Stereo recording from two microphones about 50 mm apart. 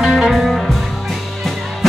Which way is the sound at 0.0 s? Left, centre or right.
Centre.